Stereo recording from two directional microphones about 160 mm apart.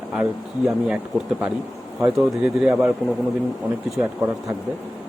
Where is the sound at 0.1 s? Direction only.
5° right (ahead or behind).